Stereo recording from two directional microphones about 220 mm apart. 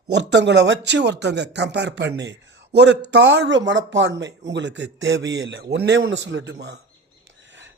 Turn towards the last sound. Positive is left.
turn(degrees=-55)  # may be behind; listen again after turning